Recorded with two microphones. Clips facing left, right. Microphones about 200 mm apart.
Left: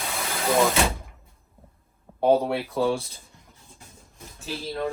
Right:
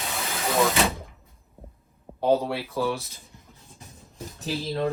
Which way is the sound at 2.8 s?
30° left (ahead or behind).